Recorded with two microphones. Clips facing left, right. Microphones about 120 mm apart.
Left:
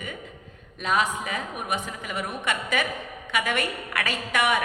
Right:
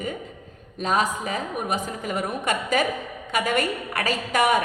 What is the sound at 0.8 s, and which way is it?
A woman's voice, 40° right (ahead or behind).